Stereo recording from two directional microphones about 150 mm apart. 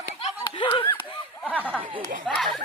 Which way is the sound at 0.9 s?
35° left (ahead or behind).